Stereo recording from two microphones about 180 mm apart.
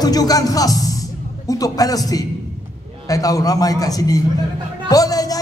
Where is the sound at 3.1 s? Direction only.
20° left (ahead or behind).